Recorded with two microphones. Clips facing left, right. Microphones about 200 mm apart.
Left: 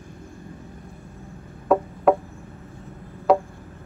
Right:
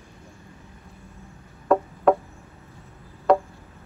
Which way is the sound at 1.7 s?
5° left (ahead or behind).